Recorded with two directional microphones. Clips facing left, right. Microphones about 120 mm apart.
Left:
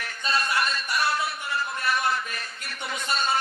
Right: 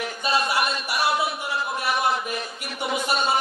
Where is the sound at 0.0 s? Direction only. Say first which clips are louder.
Right 4 dB; 15° right (ahead or behind).